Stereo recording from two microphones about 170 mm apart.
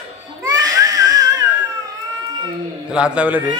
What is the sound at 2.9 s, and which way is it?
Speech, 5° right (ahead or behind).